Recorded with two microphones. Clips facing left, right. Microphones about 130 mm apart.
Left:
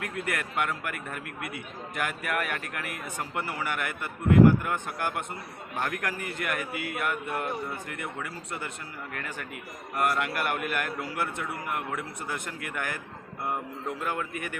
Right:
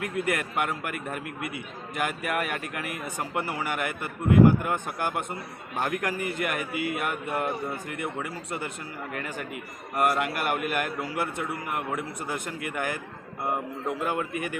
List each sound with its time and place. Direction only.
0.0 s a man's voice: 15° right (ahead or behind)